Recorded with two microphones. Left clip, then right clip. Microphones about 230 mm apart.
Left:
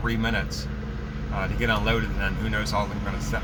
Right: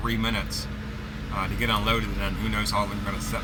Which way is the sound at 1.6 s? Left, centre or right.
Centre.